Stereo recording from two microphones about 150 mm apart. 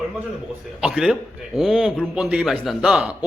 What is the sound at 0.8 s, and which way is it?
A man's voice, 5° right (ahead or behind).